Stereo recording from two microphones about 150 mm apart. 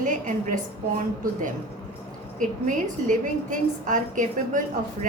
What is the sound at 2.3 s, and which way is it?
A woman's voice, 60° right (ahead or behind).